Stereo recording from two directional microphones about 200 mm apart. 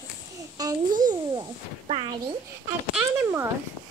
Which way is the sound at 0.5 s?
20° right (ahead or behind).